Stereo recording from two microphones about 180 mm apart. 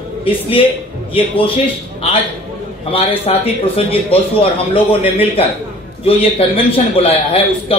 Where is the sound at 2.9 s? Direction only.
30° left (ahead or behind).